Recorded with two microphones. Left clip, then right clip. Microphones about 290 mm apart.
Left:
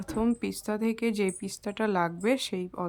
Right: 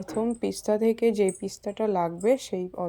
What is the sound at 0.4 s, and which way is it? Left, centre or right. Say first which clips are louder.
Speech: right 7 dB; centre.